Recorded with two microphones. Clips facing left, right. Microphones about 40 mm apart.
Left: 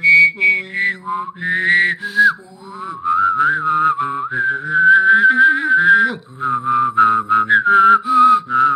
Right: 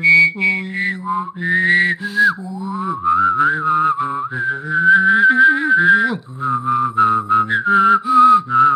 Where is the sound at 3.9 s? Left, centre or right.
Left; by 6.2 s centre.